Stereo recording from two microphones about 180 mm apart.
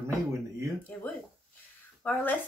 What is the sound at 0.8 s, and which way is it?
A woman's voice, 10° left (ahead or behind).